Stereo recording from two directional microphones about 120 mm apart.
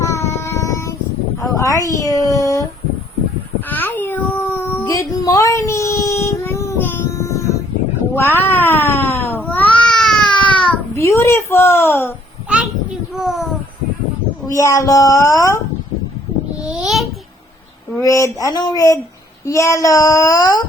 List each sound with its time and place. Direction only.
0.0 s child singing: 25° left (ahead or behind)
3.7 s a sound: 15° left (ahead or behind)
8.1 s cat: 20° left (ahead or behind)
10.4 s a sound: 10° left (ahead or behind)
10.9 s speech: 25° left (ahead or behind)
13.1 s a sound: centre (ahead or behind)
14.5 s a child's voice: 25° left (ahead or behind)
16.6 s babbling: 5° right (ahead or behind)
18.0 s a child's voice: 25° left (ahead or behind)